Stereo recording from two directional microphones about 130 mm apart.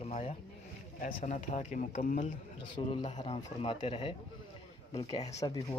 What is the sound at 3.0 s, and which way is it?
Speech, 60° left (ahead or behind).